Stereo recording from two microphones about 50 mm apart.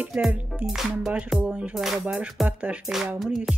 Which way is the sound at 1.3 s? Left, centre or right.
Centre.